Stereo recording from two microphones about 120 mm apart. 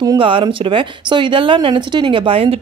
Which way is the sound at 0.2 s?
45° right (ahead or behind).